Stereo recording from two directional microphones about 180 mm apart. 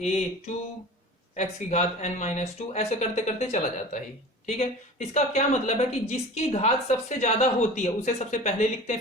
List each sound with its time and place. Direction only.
1.4 s a woman's voice: 40° left (ahead or behind)